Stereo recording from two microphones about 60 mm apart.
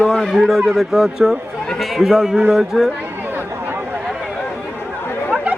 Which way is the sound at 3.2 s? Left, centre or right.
Right.